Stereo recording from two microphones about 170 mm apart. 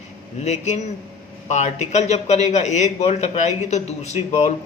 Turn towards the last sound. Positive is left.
turn(degrees=40)  # may be behind; listen again after turning